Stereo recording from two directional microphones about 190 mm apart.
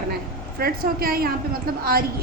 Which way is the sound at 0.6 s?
50° right (ahead or behind).